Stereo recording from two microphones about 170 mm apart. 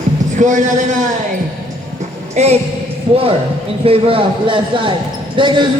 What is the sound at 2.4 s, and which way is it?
Speech, 40° right (ahead or behind).